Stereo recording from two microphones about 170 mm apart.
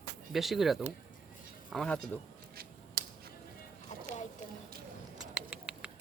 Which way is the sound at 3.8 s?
45° left (ahead or behind).